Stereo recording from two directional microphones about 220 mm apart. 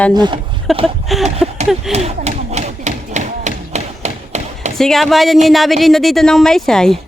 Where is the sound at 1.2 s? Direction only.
30° right (ahead or behind).